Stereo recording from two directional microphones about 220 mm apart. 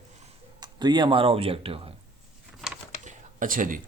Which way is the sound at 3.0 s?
35° right (ahead or behind).